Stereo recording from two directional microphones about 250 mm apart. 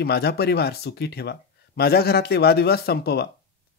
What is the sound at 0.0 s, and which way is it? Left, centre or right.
Speech, left.